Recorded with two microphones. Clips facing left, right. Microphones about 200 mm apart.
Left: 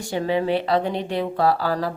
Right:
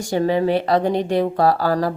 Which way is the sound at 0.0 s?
45° right (ahead or behind).